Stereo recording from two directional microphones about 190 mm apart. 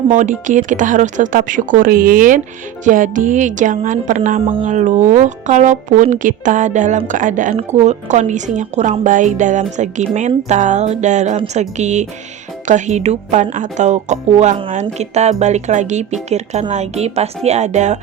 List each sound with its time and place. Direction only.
0.1 s speech: 40° right (ahead or behind)
4.4 s speech: 30° right (ahead or behind)
4.6 s a woman's voice: 40° right (ahead or behind)